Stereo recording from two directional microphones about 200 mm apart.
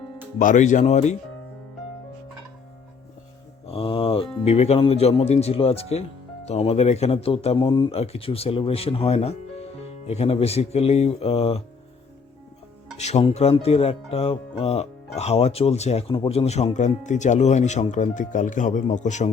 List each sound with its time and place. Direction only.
0.3 s speech: 40° left (ahead or behind)
3.7 s speech: 30° left (ahead or behind)
13.0 s speech: 35° left (ahead or behind)